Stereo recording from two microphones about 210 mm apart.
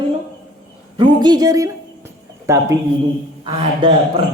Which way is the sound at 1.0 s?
20° right (ahead or behind).